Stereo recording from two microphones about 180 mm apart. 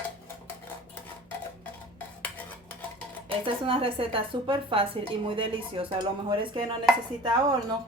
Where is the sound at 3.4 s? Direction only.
30° right (ahead or behind).